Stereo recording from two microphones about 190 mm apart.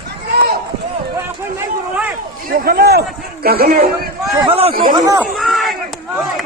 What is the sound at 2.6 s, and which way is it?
A man's voice, 55° right (ahead or behind).